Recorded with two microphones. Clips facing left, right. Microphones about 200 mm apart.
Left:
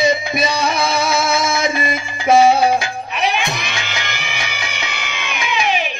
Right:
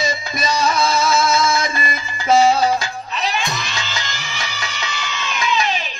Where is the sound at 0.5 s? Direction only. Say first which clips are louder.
Even; 60° left (ahead or behind).